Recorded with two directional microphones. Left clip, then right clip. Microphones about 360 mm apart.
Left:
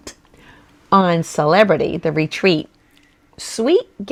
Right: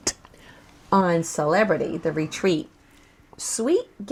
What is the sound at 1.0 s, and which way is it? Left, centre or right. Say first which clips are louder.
Speech: left 6 dB; left.